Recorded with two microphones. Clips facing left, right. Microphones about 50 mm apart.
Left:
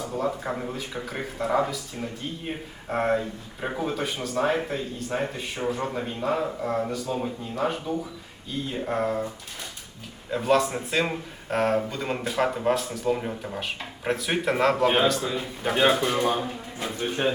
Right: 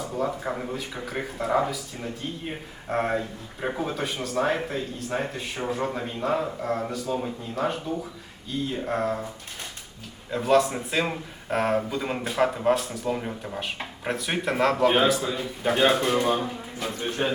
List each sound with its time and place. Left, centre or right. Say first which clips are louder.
0.2 s speech: right 1 dB; centre
10.3 s speech: right 1 dB; centre
16.8 s speech: even; centre